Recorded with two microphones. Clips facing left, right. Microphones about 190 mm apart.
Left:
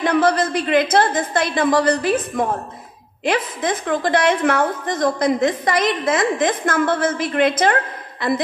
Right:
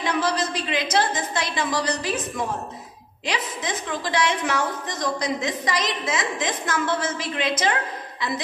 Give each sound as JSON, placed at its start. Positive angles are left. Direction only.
{"t": 0.0, "sound": "a woman's voice", "side_deg": 55}